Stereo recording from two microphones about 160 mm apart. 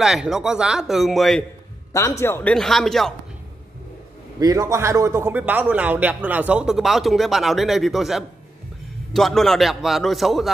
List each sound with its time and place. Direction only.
0.0 s speech: 5° right (ahead or behind)
1.9 s a man's voice: 20° left (ahead or behind)
2.5 s speech: 5° left (ahead or behind)
4.4 s speech: 20° right (ahead or behind); by 10.5 s centre (ahead or behind)